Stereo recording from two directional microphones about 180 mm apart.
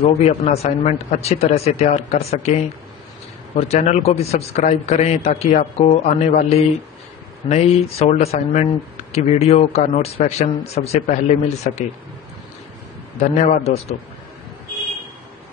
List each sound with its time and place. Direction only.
0.2 s speech: 35° left (ahead or behind)
13.7 s speech: 35° left (ahead or behind)